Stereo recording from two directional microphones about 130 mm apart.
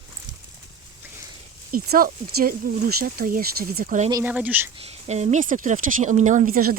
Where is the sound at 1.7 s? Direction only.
90° right.